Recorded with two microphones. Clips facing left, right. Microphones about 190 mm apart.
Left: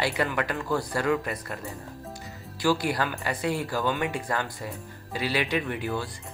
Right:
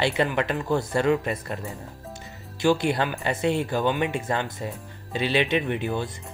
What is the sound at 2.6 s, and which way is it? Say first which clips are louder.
Speech: right 3 dB; 25° right (ahead or behind).